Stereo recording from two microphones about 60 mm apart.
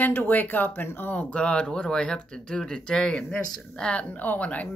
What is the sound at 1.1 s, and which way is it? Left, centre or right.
A woman's voice, centre.